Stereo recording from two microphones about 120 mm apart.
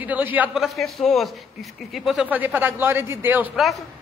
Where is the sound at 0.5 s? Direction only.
Centre (ahead or behind).